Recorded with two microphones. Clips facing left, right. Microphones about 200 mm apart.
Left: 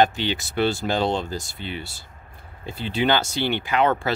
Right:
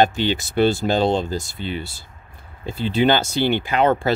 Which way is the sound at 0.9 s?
40° right (ahead or behind).